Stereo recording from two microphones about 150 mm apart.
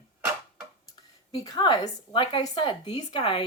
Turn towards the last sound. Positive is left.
turn(degrees=35)  # may be behind; listen again after turning